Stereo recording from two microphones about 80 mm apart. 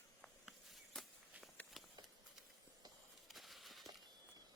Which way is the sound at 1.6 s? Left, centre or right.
Centre.